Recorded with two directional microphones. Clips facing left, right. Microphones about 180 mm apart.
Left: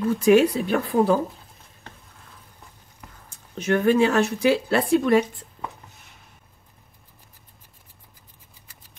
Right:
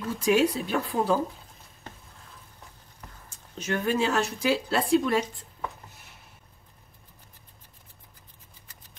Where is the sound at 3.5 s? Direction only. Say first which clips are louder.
Left 8 dB; 60° left (ahead or behind).